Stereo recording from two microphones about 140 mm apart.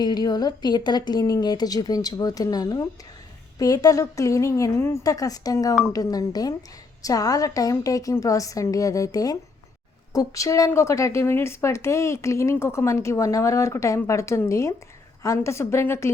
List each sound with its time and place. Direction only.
0.0 s a woman's voice: 30° left (ahead or behind)